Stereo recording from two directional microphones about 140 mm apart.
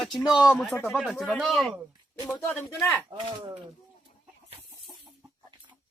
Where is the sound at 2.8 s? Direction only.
15° left (ahead or behind).